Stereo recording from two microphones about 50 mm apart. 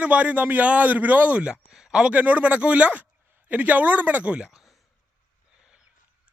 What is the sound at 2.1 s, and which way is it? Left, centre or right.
A man's voice, right.